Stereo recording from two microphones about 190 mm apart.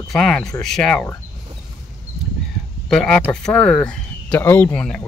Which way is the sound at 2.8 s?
5° left (ahead or behind).